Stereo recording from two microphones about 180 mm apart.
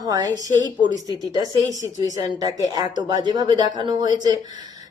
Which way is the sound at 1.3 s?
20° right (ahead or behind).